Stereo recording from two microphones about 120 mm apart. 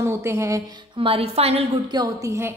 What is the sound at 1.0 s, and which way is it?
Speech, 55° right (ahead or behind).